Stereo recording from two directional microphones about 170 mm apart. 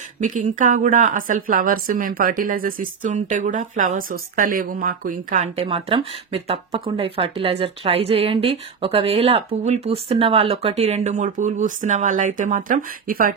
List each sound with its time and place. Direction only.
0.2 s a woman's voice: 50° right (ahead or behind)
5.6 s speech: 35° right (ahead or behind); by 13.3 s 55° right (ahead or behind)